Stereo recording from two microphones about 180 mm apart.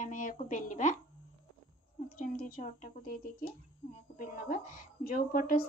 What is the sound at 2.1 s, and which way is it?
Speech, 50° left (ahead or behind).